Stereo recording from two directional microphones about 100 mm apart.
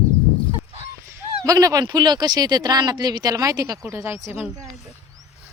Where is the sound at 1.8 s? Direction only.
45° right (ahead or behind).